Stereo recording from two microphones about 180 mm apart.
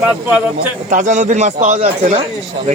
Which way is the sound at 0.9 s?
45° right (ahead or behind).